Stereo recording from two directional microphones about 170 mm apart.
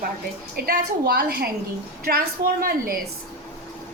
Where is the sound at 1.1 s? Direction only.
65° right (ahead or behind).